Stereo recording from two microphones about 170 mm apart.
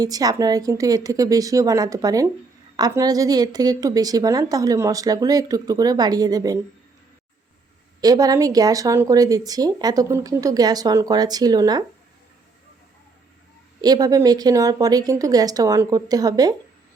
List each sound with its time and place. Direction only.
0.0 s a woman's voice: 20° right (ahead or behind)
8.0 s a woman's voice: 20° right (ahead or behind)
13.8 s a woman's voice: 20° right (ahead or behind)